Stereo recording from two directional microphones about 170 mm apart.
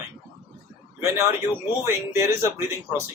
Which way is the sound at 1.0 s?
15° right (ahead or behind).